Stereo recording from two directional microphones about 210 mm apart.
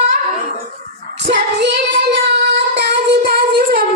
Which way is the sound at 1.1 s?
55° right (ahead or behind).